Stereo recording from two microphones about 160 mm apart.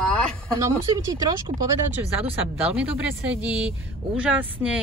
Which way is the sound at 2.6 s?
10° right (ahead or behind).